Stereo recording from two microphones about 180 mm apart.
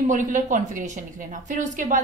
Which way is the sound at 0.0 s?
45° right (ahead or behind).